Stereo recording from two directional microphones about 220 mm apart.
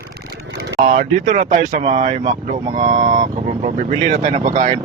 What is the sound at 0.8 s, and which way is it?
Speech, 35° right (ahead or behind).